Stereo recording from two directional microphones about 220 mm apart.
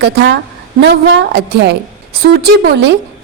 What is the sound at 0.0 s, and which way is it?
A woman's voice, 55° right (ahead or behind).